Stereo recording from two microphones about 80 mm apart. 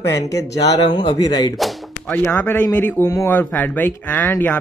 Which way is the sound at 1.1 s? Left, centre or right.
Left.